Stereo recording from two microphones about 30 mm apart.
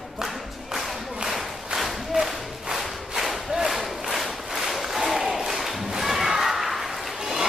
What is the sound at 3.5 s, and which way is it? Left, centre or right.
Crowd, centre.